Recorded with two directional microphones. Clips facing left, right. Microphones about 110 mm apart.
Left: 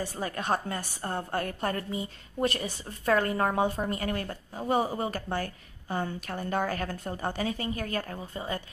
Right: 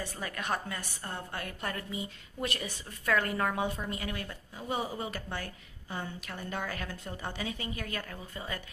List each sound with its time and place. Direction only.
0.0 s a woman's voice: 35° left (ahead or behind)